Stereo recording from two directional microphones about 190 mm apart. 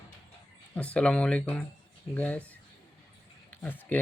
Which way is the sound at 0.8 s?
5° left (ahead or behind).